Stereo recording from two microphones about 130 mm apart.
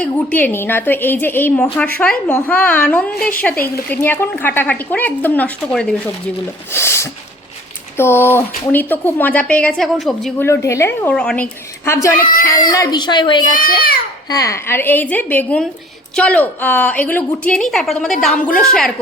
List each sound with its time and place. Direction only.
0.0 s a woman's voice: 10° left (ahead or behind)
6.7 s a woman's voice: 20° left (ahead or behind); by 10.3 s centre (ahead or behind)
10.3 s a woman's voice: 20° left (ahead or behind)
11.1 s a woman's voice: 5° left (ahead or behind)
11.9 s a woman's voice: 25° left (ahead or behind)
13.4 s a child's voice: 90° left
14.3 s a woman's voice: 25° left (ahead or behind); by 18.9 s 5° left (ahead or behind)